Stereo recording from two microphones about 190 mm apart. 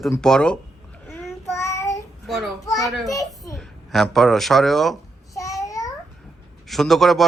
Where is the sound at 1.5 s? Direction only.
15° left (ahead or behind).